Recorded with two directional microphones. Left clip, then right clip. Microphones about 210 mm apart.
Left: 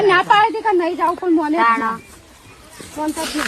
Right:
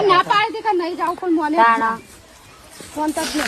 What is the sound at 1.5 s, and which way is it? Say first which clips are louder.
Speech: right 4 dB; 45° right (ahead or behind).